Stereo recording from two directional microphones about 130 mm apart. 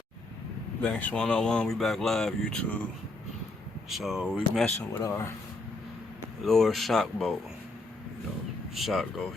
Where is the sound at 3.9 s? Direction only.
5° right (ahead or behind).